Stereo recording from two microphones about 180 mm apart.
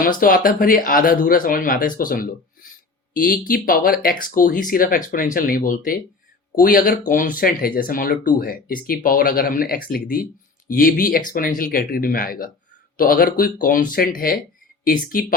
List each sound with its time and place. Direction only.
0.0 s speech: 50° left (ahead or behind)